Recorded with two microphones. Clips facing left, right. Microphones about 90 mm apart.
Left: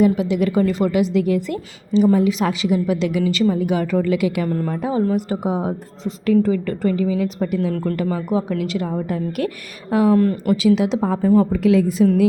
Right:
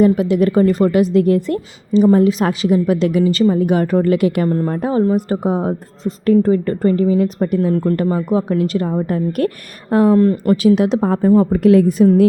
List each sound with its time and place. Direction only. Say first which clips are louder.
0.0 s a woman's voice: right 4 dB; 45° right (ahead or behind)
4.4 s a woman's voice: right 5 dB; 35° right (ahead or behind)
4.8 s a woman's voice: right 3 dB; 50° right (ahead or behind)
7.7 s a woman's voice: right 5 dB; 30° right (ahead or behind)
10.2 s speech: right 4 dB; 30° right (ahead or behind)
10.5 s a woman's voice: right 2 dB; 45° right (ahead or behind)
11.6 s a woman's voice: right 5 dB; 50° right (ahead or behind)